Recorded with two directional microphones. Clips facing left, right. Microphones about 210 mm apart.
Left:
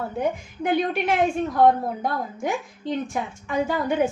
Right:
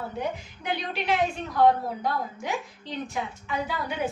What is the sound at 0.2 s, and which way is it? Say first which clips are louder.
A woman's voice: left 9 dB; 50° left (ahead or behind).